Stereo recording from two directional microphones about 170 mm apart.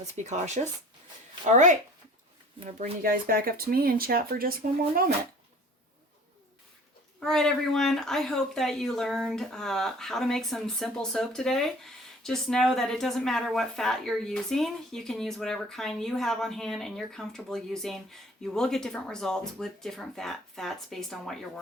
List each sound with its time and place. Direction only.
0.3 s speech: 45° right (ahead or behind)
3.0 s speech: 60° right (ahead or behind)
7.2 s speech: 5° left (ahead or behind)